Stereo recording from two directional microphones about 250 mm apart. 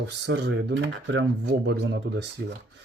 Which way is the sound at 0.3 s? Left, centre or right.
Right.